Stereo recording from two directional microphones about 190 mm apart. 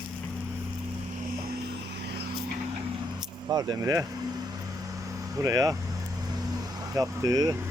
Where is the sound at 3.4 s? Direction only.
20° right (ahead or behind).